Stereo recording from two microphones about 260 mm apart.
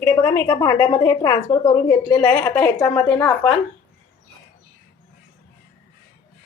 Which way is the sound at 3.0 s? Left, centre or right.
Centre.